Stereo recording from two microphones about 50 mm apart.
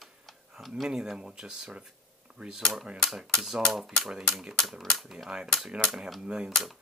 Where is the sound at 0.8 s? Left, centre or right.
Centre.